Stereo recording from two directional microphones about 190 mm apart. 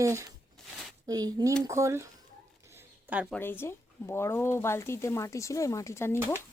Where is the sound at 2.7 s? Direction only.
10° right (ahead or behind).